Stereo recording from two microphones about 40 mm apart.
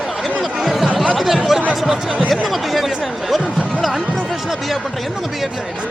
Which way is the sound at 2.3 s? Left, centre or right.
Centre.